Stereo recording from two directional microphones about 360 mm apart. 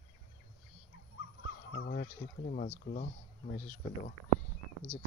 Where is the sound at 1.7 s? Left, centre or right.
Left.